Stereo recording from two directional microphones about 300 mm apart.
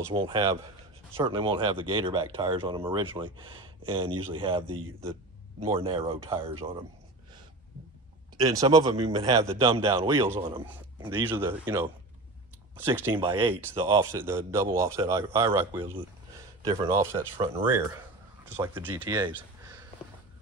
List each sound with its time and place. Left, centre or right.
0.0 s speech: centre
5.7 s speech: centre
8.4 s speech: centre